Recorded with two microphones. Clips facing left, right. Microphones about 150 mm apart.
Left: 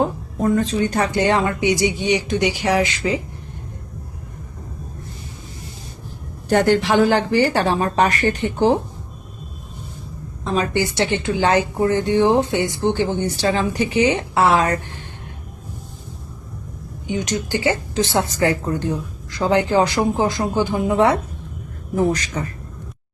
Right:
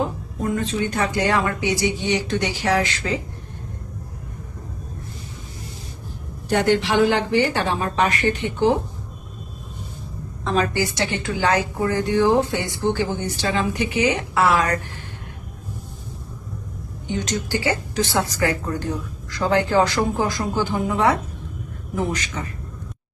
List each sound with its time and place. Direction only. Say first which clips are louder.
0.5 s a woman's voice: left 3 dB; 35° left (ahead or behind)
1.2 s speech: left 4 dB; 25° left (ahead or behind)
6.5 s a woman's voice: left 3 dB; 45° left (ahead or behind)
10.5 s a woman's voice: left 1 dB; 25° left (ahead or behind)
13.3 s a woman's voice: left 3 dB; 35° left (ahead or behind)
17.2 s a woman's voice: left 3 dB; 20° left (ahead or behind)
21.9 s a woman's voice: left 6 dB; 40° left (ahead or behind)